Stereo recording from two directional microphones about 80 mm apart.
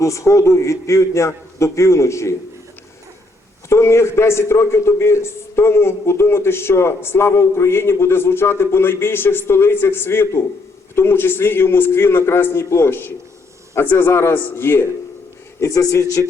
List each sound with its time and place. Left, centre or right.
0.0 s a man's voice: left
3.7 s a man's voice: left
15.6 s a man's voice: left